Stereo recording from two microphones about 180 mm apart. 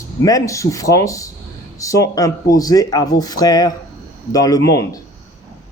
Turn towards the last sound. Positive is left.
turn(degrees=20)  # may be behind; listen again after turning